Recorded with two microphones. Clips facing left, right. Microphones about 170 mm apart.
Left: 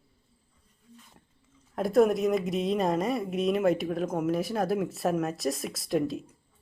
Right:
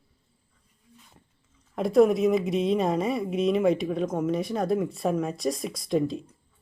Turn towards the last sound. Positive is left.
turn(degrees=5)  # may be behind; listen again after turning